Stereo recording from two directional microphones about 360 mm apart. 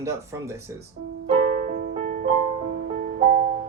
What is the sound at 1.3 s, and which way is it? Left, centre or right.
Music, centre.